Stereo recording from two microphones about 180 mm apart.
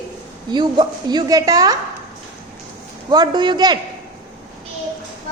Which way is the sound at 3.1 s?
25° right (ahead or behind).